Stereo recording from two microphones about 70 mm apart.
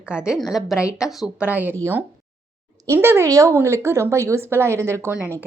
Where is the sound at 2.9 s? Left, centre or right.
Right.